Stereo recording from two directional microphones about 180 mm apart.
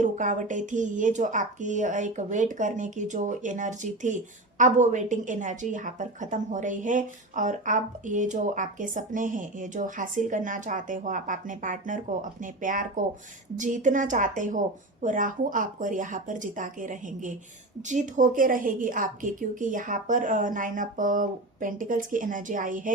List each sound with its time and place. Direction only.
0.0 s speech: 45° right (ahead or behind)